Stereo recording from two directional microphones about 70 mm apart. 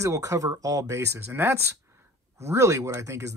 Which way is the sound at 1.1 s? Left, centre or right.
Right.